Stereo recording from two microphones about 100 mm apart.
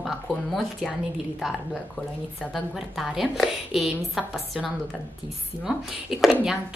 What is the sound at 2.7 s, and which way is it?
Speech, centre (ahead or behind).